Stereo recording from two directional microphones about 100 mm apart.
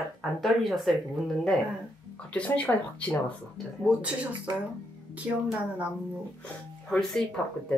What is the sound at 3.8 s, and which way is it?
Speech, 15° right (ahead or behind).